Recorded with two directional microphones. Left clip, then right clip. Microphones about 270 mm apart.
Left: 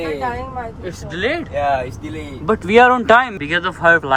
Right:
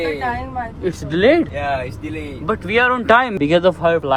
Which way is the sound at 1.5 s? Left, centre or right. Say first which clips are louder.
Left 4 dB; left.